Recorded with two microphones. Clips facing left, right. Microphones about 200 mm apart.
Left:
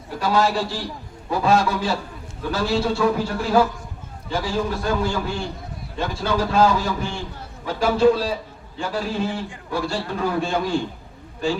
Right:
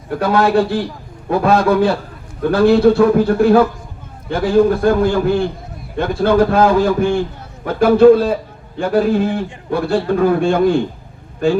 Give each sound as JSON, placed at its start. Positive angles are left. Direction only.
{"t": 0.1, "sound": "a man's voice", "side_deg": -60}